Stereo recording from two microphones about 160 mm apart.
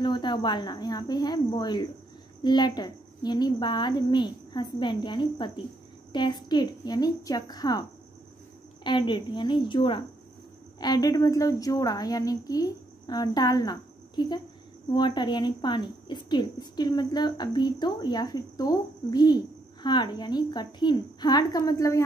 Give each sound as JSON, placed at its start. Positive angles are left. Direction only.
{"t": 0.0, "sound": "speech", "side_deg": 30}
{"t": 8.8, "sound": "speech", "side_deg": 30}